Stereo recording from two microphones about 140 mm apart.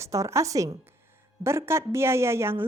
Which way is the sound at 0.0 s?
20° right (ahead or behind).